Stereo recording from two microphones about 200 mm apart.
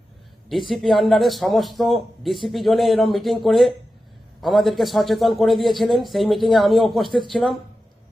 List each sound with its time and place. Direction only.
0.7 s a man's voice: centre (ahead or behind)